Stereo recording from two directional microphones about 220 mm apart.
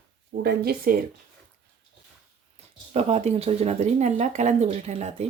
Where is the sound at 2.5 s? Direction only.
30° right (ahead or behind).